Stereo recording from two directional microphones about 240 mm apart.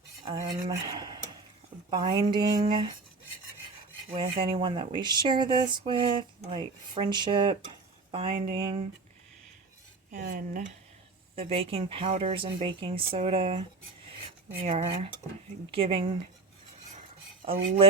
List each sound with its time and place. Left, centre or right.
0.3 s cutlery: centre
1.9 s speech: centre
4.1 s speech: right
10.1 s speech: right
11.3 s speech: right
14.6 s speech: right